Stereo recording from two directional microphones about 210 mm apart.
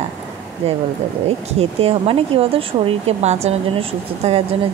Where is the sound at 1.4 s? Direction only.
30° right (ahead or behind).